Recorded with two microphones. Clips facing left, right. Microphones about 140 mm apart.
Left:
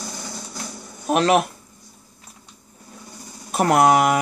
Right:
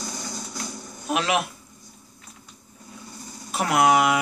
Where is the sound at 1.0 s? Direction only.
45° left (ahead or behind).